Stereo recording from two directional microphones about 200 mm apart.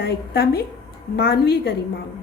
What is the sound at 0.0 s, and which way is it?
A woman's voice, 55° left (ahead or behind).